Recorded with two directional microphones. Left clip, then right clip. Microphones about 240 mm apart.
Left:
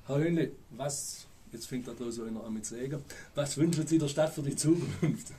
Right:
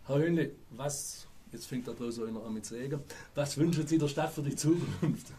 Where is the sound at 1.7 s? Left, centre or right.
Right.